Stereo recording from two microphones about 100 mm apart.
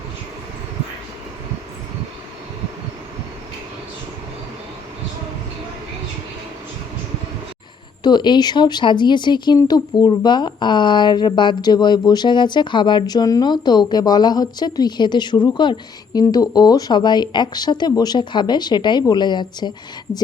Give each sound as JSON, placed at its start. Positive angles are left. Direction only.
{"t": 8.0, "sound": "a woman's voice", "side_deg": 50}